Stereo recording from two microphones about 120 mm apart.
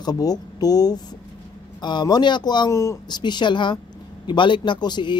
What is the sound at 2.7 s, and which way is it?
Speech, 25° left (ahead or behind).